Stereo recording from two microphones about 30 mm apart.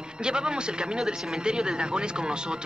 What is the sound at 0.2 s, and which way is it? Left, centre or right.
A child's voice, right.